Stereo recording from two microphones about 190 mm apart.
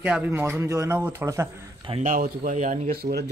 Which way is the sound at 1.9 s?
40° right (ahead or behind).